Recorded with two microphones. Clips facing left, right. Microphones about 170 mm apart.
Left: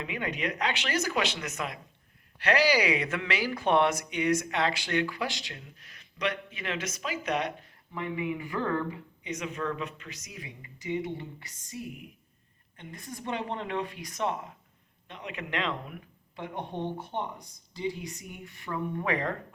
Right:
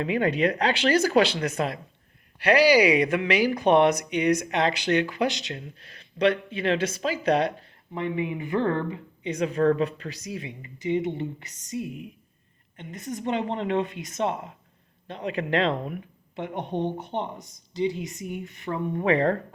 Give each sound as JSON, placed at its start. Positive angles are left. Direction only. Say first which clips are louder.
{"t": 0.0, "sound": "speech", "louder": "right 10 dB", "side_deg": -35}
{"t": 2.4, "sound": "speech", "louder": "right 7 dB", "side_deg": -10}
{"t": 16.3, "sound": "speech", "louder": "right 6 dB", "side_deg": -20}